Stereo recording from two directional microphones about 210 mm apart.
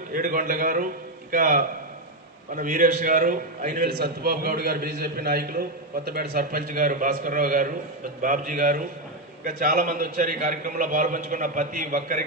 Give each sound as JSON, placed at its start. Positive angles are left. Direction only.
{"t": 0.1, "sound": "a man's voice", "side_deg": -40}